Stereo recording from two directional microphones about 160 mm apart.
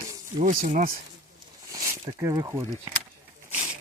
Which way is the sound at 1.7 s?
20° right (ahead or behind).